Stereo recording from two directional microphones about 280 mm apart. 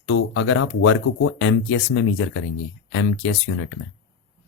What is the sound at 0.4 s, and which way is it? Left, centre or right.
Speech, left.